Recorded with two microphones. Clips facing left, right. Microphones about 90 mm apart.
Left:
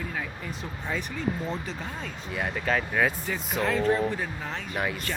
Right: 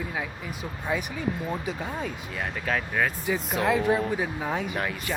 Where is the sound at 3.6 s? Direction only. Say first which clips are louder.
Even; 15° right (ahead or behind).